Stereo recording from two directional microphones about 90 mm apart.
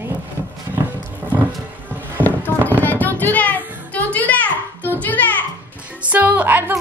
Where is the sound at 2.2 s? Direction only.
20° left (ahead or behind).